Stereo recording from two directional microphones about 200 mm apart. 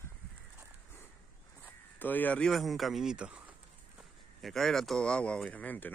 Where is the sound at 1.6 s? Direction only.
10° left (ahead or behind).